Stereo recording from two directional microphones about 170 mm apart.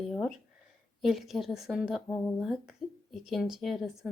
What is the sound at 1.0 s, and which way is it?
Speech, centre (ahead or behind).